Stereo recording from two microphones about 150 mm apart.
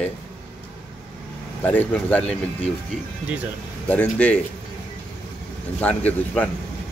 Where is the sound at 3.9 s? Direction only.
10° left (ahead or behind).